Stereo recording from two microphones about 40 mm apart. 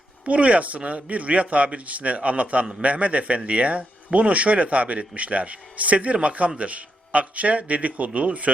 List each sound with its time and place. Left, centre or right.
0.3 s a man's voice: right